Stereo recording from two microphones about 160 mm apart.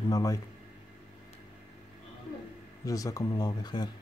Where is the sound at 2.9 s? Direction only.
20° left (ahead or behind).